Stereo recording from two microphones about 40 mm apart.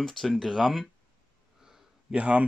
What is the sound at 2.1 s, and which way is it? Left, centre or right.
Speech, right.